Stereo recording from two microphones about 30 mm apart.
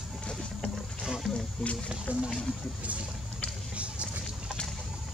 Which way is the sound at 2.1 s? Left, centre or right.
Right.